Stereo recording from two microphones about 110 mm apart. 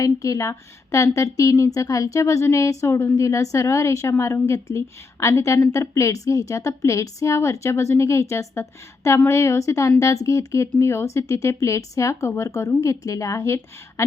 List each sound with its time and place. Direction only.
0.0 s speech: 30° left (ahead or behind)